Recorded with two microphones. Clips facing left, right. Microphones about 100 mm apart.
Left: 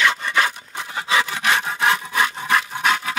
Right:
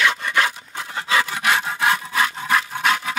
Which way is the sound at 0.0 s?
Centre (ahead or behind).